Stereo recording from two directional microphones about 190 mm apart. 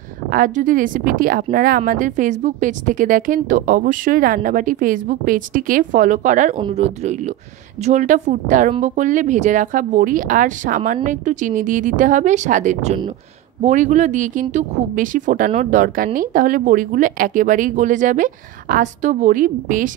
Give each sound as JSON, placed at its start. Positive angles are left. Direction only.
{"t": 0.3, "sound": "a woman's voice", "side_deg": -45}